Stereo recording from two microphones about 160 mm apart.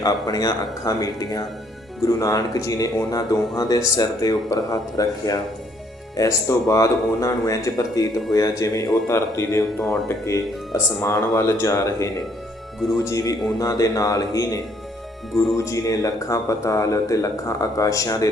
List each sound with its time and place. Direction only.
0.0 s speech: 25° left (ahead or behind)